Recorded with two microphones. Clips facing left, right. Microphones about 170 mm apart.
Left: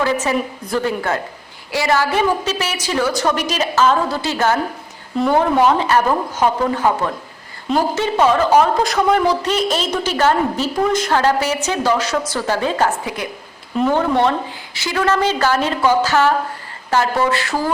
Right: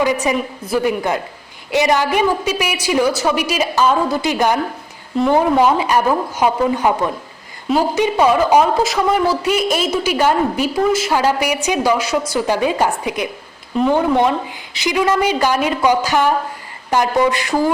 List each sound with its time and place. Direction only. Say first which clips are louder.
0.0 s a woman's voice: right 1 dB; 15° right (ahead or behind)
5.1 s speech: right 1 dB; centre (ahead or behind)
5.4 s a woman's voice: right 1 dB; 10° right (ahead or behind)